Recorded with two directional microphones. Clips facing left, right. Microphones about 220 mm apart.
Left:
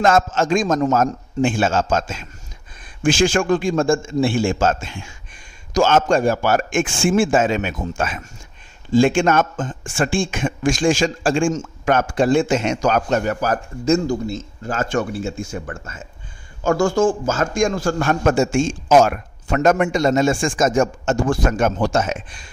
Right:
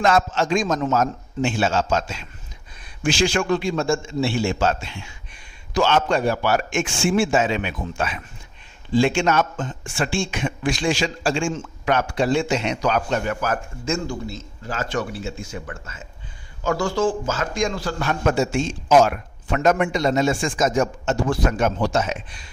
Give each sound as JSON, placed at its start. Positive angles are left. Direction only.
{"t": 0.0, "sound": "a man's voice", "side_deg": 45}